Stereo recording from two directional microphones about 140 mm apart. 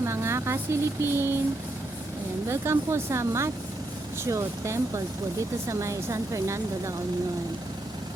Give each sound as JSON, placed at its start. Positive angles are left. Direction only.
{"t": 0.0, "sound": "speech", "side_deg": -20}
{"t": 2.5, "sound": "speech", "side_deg": -20}